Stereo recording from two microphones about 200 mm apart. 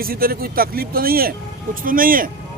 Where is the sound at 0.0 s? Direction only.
45° right (ahead or behind).